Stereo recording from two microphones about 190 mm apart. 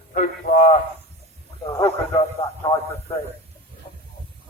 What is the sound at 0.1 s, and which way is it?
Speech, 40° left (ahead or behind).